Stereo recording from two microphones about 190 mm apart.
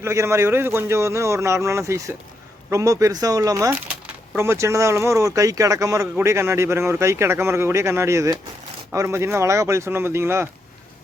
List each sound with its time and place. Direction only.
0.0 s speech: 15° right (ahead or behind)